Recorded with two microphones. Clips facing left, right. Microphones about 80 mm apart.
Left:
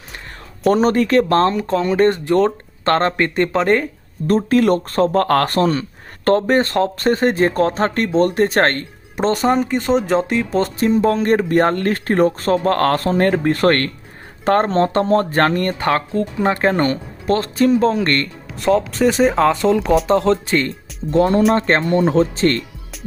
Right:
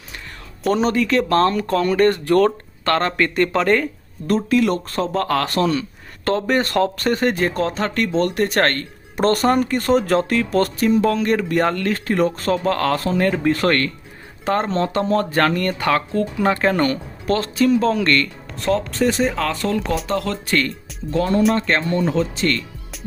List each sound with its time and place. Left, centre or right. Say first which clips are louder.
0.7 s speech: left 4 dB; left
1.2 s speech: left 2 dB; left
4.3 s speech: left 3 dB; left
9.3 s speech: left 2 dB; centre; by 18.3 s left
18.6 s speech: left 4 dB; centre
19.3 s speech: left 7 dB; left